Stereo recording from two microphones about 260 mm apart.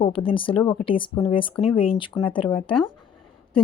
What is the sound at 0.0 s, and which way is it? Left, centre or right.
Speech, centre.